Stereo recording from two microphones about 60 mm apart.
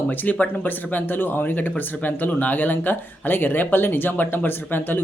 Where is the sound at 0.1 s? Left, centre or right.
Left.